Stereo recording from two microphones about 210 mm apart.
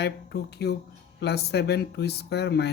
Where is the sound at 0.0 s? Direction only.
50° left (ahead or behind).